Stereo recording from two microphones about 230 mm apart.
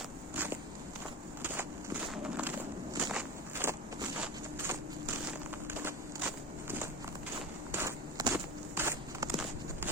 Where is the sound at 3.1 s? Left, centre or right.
Centre.